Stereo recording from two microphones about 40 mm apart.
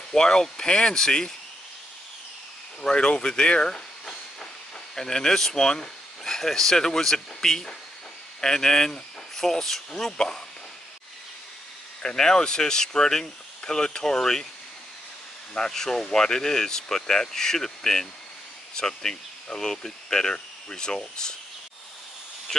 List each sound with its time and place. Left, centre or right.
0.1 s speech: centre
2.8 s speech: left
12.0 s speech: centre
15.5 s speech: centre